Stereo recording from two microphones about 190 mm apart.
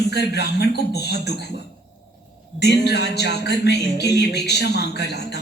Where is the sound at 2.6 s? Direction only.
60° left (ahead or behind).